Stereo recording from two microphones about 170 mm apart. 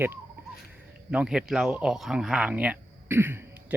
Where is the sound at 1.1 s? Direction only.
5° right (ahead or behind).